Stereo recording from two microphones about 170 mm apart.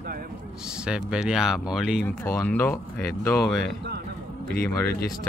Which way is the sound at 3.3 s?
Centre (ahead or behind).